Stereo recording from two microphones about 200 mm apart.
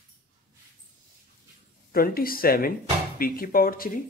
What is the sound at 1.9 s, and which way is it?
Speech, 45° left (ahead or behind).